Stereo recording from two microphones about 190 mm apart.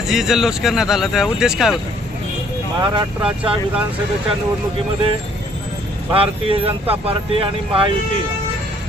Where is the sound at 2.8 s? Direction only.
25° right (ahead or behind).